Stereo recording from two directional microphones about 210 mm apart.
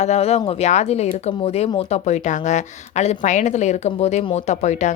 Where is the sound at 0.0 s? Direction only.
30° left (ahead or behind).